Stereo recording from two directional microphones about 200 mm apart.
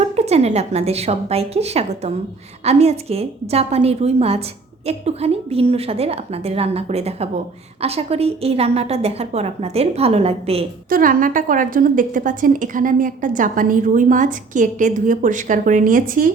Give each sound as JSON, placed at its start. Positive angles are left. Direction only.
{"t": 0.2, "sound": "a woman's voice", "side_deg": -30}
{"t": 10.8, "sound": "a woman's voice", "side_deg": -45}